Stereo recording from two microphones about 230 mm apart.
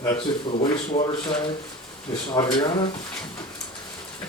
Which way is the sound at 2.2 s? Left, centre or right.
Left.